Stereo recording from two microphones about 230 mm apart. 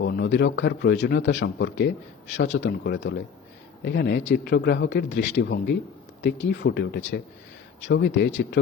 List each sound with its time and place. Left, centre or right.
0.0 s a man's voice: left